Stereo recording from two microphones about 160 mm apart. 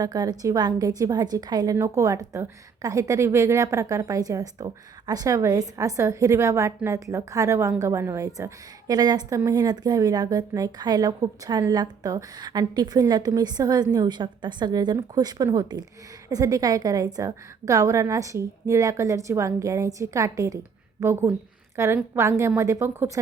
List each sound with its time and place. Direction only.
0.0 s a woman's voice: 25° right (ahead or behind)